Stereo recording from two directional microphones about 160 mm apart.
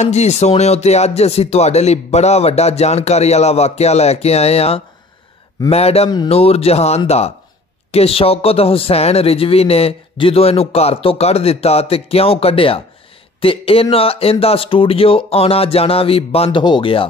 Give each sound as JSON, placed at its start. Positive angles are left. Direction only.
{"t": 0.0, "sound": "speech", "side_deg": 45}